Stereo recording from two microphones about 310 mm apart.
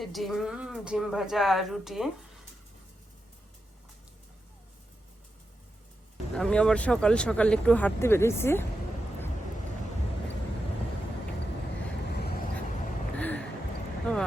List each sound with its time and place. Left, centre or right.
0.0 s speech: centre
6.3 s speech: centre
12.1 s vehicle: left
13.1 s a sound: centre